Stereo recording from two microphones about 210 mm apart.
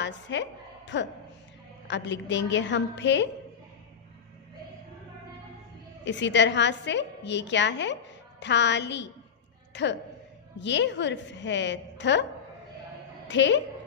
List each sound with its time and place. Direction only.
0.0 s music: 60° left (ahead or behind)
1.9 s a woman's voice: 60° left (ahead or behind)
6.0 s a woman's voice: 60° left (ahead or behind)
13.3 s a woman's voice: 60° left (ahead or behind)